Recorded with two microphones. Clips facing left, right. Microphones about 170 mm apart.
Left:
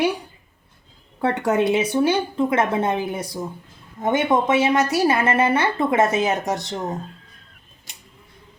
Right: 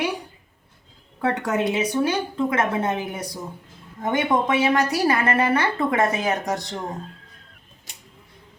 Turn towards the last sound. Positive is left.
turn(degrees=20)  # may be behind; listen again after turning